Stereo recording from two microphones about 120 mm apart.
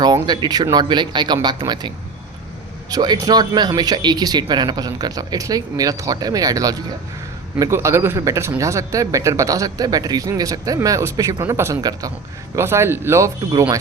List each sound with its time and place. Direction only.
0.0 s speech: 35° right (ahead or behind)
2.9 s speech: 35° right (ahead or behind)
12.5 s speech: 20° right (ahead or behind)